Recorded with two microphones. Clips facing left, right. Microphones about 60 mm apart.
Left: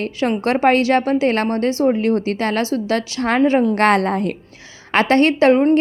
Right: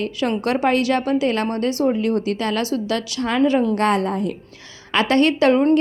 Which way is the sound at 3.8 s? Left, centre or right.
Left.